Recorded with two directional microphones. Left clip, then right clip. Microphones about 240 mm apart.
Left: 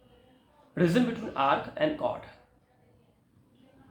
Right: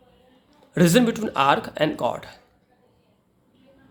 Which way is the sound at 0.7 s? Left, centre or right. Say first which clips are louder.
Right 8 dB; right.